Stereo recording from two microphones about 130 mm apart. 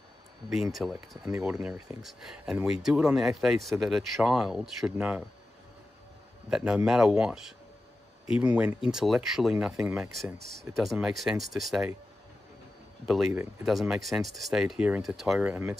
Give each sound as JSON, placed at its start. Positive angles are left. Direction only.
{"t": 0.7, "sound": "speech", "side_deg": 0}
{"t": 6.5, "sound": "speech", "side_deg": -5}
{"t": 13.0, "sound": "speech", "side_deg": 0}